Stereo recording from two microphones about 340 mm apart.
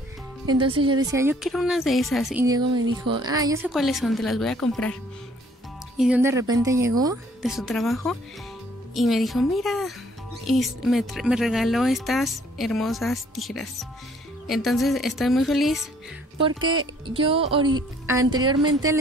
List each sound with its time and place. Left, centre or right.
0.6 s speech: centre
3.7 s speech: centre
5.9 s speech: centre
17.0 s speech: centre
18.6 s speech: right